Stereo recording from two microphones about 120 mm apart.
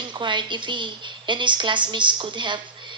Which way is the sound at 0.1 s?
40° right (ahead or behind).